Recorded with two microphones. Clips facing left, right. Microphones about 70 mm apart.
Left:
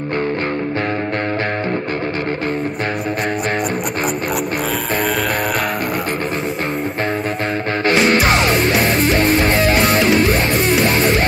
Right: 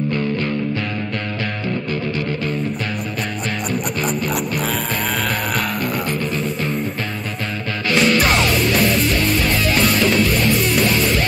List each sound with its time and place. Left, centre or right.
8.3 s music: left